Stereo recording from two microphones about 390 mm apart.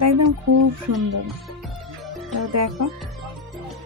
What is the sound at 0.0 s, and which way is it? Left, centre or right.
Speech, right.